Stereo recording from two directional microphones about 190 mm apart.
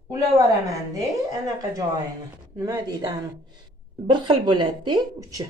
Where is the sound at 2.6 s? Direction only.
20° right (ahead or behind).